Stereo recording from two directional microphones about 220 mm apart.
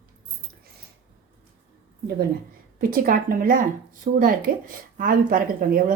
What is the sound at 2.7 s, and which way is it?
A woman's voice, 40° right (ahead or behind).